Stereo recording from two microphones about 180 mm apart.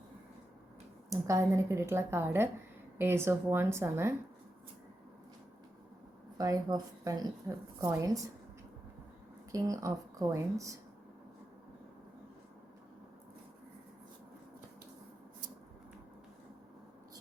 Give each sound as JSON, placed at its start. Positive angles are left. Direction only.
{"t": 1.1, "sound": "speech", "side_deg": -15}
{"t": 6.3, "sound": "a woman's voice", "side_deg": -20}
{"t": 9.5, "sound": "a woman's voice", "side_deg": -20}